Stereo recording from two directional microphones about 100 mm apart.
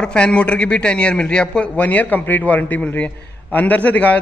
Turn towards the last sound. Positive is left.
turn(degrees=15)  # may be behind; listen again after turning